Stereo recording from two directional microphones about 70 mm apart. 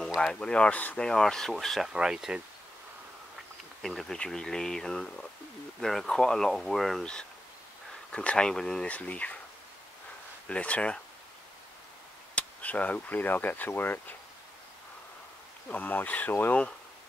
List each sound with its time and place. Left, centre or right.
0.2 s speech: centre
1.0 s speech: centre
1.9 s speech: centre
3.8 s speech: centre
10.5 s speech: centre
12.4 s speech: left
15.7 s speech: left